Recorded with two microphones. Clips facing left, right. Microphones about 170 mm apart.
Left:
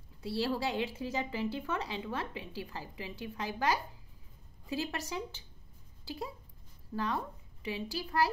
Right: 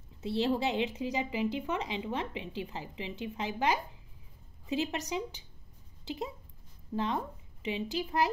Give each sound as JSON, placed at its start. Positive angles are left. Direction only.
{"t": 0.2, "sound": "a woman's voice", "side_deg": -20}